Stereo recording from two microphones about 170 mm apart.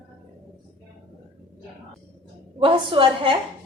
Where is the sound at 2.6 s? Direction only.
30° right (ahead or behind).